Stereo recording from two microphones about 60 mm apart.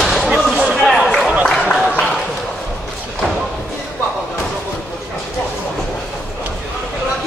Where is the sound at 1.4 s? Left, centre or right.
Centre.